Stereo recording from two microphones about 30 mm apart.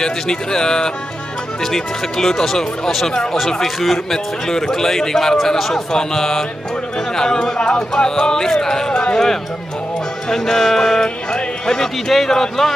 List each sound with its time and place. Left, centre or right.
0.0 s a man's voice: left
10.3 s a man's voice: centre